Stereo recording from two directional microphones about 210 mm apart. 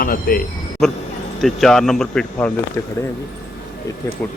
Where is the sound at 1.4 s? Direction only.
Centre (ahead or behind).